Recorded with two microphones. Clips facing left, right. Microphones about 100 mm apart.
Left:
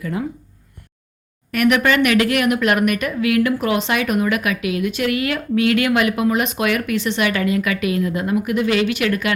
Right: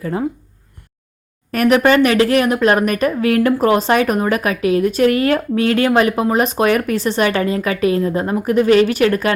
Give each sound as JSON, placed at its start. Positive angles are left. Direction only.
{"t": 0.0, "sound": "a woman's voice", "side_deg": -35}
{"t": 1.5, "sound": "a woman's voice", "side_deg": -35}